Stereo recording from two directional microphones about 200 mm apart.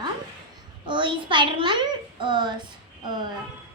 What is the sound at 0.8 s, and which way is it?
Speech, 25° right (ahead or behind).